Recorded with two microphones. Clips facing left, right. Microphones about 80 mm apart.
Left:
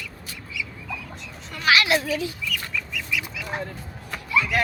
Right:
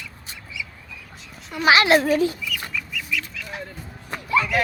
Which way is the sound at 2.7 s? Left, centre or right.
Centre.